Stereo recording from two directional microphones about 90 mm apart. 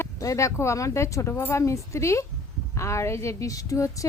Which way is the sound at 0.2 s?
35° left (ahead or behind).